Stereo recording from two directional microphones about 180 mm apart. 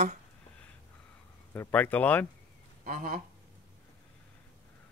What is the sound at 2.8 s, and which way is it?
Speech, 50° right (ahead or behind).